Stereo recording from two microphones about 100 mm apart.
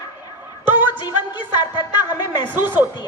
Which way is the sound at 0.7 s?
20° right (ahead or behind).